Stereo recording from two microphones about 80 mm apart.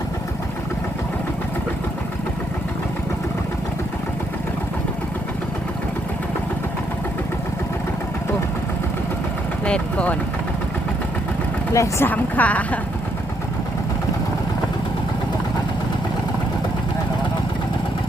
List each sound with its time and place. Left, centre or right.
9.6 s vehicle: centre
11.7 s speech: left
12.0 s a woman's voice: centre